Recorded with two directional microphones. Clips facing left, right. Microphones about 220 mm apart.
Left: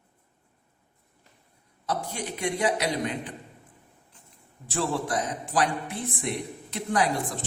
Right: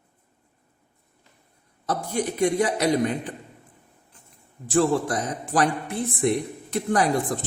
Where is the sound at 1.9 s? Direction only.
45° right (ahead or behind).